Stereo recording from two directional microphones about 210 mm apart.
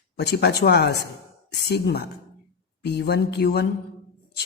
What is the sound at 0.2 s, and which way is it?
Speech, 50° left (ahead or behind).